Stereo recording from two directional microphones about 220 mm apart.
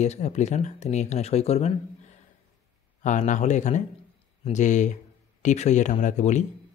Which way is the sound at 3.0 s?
35° left (ahead or behind).